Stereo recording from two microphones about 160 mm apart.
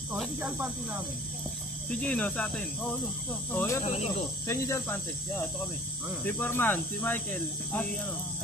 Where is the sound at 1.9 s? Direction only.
10° left (ahead or behind).